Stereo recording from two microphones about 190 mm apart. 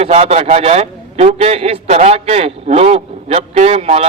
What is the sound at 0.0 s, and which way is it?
A man's voice, 35° right (ahead or behind).